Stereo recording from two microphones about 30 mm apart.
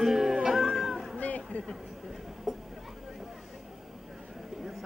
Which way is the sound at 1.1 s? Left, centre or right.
Left.